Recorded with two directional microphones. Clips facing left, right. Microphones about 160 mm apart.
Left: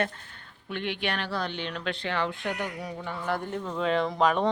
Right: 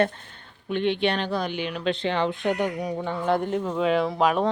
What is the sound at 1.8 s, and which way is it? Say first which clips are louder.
Speech: right 6 dB; 20° right (ahead or behind).